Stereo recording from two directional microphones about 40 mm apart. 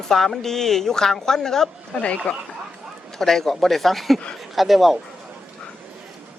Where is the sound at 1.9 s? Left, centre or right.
Left.